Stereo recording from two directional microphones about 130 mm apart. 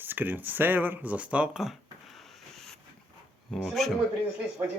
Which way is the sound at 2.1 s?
5° left (ahead or behind).